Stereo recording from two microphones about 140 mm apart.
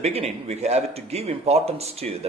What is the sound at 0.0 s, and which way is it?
A man's voice, 50° right (ahead or behind).